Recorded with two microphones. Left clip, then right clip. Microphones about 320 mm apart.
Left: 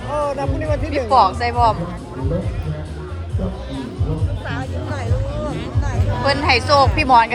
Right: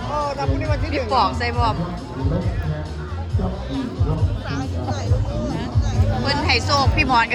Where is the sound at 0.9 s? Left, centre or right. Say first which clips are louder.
Left 5 dB; centre.